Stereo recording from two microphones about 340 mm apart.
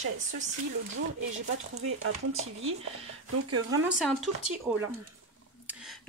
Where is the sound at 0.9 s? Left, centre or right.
Right.